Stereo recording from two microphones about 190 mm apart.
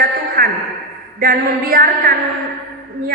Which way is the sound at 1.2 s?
50° right (ahead or behind).